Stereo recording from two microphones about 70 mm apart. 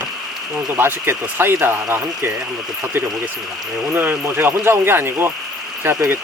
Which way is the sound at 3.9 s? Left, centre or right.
Right.